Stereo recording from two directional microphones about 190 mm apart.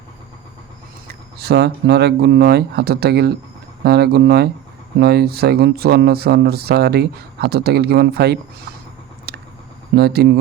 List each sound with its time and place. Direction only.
1.0 s speech: 60° right (ahead or behind)
9.3 s a sound: 55° right (ahead or behind)
9.9 s speech: 55° right (ahead or behind)